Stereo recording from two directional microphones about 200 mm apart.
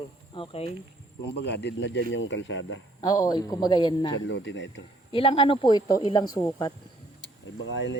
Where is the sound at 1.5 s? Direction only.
60° left (ahead or behind).